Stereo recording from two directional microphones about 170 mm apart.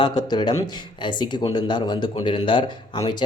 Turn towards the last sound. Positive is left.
turn(degrees=25)  # may be behind; listen again after turning